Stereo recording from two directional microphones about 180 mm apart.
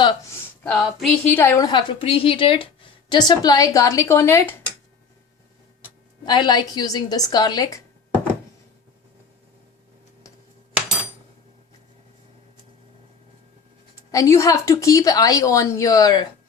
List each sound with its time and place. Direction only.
0.0 s a sound: 25° left (ahead or behind)
0.6 s a woman's voice: 5° left (ahead or behind)
6.2 s a woman's voice: 25° left (ahead or behind)
14.1 s a woman's voice: 15° left (ahead or behind)